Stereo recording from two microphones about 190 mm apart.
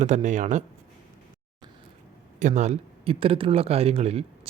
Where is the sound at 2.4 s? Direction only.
40° right (ahead or behind).